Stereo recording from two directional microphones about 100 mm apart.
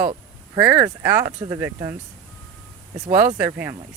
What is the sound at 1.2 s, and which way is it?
Speech, 30° right (ahead or behind).